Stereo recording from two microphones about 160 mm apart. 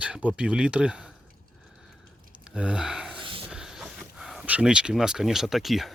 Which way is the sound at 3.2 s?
35° right (ahead or behind).